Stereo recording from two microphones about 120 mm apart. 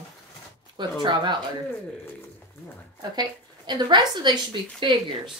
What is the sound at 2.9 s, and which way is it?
A woman's voice, 35° right (ahead or behind).